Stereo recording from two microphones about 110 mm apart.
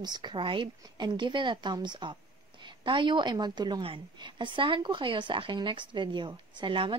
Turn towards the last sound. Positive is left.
turn(degrees=-50)  # may be behind; listen again after turning